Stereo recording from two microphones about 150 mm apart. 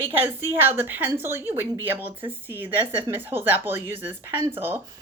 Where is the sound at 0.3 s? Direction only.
15° right (ahead or behind).